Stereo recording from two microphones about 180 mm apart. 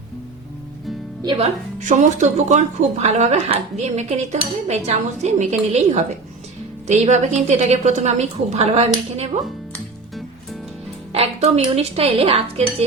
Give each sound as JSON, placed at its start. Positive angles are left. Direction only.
{"t": 1.2, "sound": "speech", "side_deg": -25}
{"t": 1.8, "sound": "a woman's voice", "side_deg": -45}
{"t": 9.7, "sound": "music", "side_deg": 0}
{"t": 11.1, "sound": "a woman's voice", "side_deg": -35}